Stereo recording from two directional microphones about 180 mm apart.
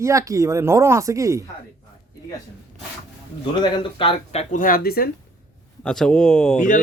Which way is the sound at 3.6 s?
30° left (ahead or behind).